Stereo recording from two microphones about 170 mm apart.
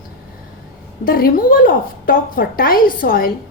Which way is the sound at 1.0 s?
60° left (ahead or behind).